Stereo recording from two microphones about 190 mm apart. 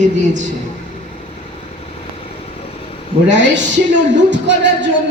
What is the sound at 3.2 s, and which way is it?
Speech, 70° right (ahead or behind).